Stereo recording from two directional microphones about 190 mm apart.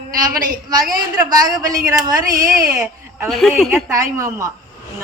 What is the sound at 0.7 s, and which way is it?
A woman's voice, 20° right (ahead or behind).